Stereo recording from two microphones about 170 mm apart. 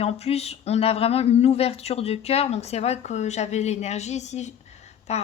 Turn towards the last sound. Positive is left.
turn(degrees=40)  # may be behind; listen again after turning